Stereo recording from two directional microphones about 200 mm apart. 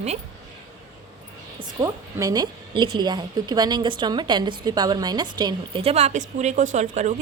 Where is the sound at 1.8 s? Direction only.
15° right (ahead or behind).